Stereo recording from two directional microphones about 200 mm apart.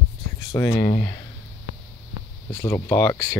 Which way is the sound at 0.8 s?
50° left (ahead or behind).